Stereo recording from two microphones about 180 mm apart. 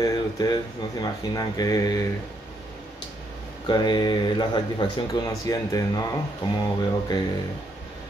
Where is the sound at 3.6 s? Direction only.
25° left (ahead or behind).